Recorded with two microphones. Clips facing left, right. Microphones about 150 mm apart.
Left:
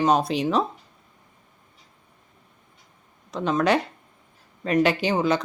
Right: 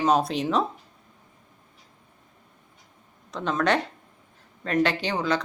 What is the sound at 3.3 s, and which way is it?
Speech, 5° left (ahead or behind).